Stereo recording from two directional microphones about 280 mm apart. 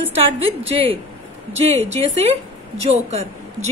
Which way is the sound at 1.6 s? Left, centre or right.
Right.